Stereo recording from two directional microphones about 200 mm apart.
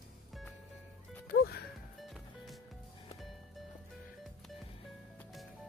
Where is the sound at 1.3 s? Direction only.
50° left (ahead or behind).